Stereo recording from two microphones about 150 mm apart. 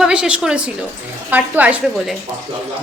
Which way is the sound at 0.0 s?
5° right (ahead or behind).